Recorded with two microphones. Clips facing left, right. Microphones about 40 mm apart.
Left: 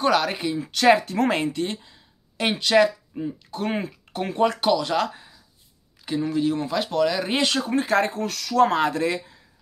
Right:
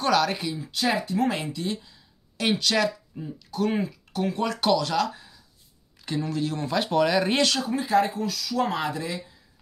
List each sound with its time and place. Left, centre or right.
0.0 s speech: left
0.6 s speech: left
4.6 s speech: centre
4.9 s speech: left
6.0 s speech: centre
6.7 s speech: centre
7.4 s speech: left
7.7 s speech: left